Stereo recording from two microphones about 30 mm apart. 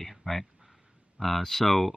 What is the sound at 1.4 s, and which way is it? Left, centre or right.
Speech, centre.